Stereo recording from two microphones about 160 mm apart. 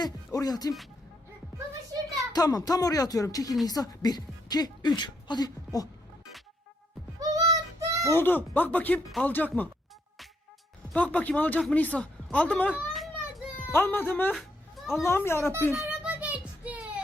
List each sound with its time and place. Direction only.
0.3 s speech: 25° left (ahead or behind)
2.3 s speech: 25° left (ahead or behind)
7.2 s child singing: 25° right (ahead or behind)
8.1 s speech: 10° left (ahead or behind)
10.8 s speech: 10° left (ahead or behind)
12.7 s a sound: centre (ahead or behind)
13.6 s a child's voice: 15° left (ahead or behind)
14.3 s a sound: centre (ahead or behind)
15.0 s speech: 15° left (ahead or behind)
15.7 s a sound: 5° right (ahead or behind)